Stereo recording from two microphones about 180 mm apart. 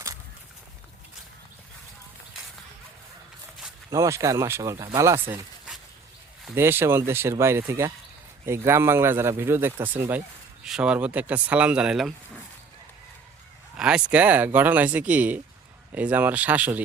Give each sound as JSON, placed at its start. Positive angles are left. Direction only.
{"t": 3.8, "sound": "speech", "side_deg": -20}
{"t": 5.3, "sound": "a sound", "side_deg": -5}
{"t": 6.4, "sound": "speech", "side_deg": -10}
{"t": 13.7, "sound": "speech", "side_deg": -5}